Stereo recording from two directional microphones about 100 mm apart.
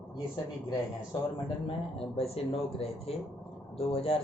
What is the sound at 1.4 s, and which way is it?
Speech, 65° left (ahead or behind).